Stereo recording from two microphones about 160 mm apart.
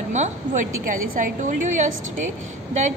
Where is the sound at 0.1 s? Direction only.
50° right (ahead or behind).